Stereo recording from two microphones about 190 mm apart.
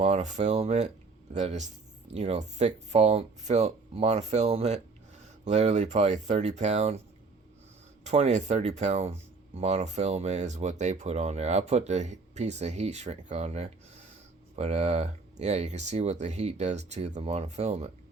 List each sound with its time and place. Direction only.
0.0 s speech: 35° right (ahead or behind)
8.0 s speech: 35° right (ahead or behind)